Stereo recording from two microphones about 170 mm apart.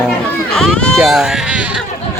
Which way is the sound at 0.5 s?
5° left (ahead or behind).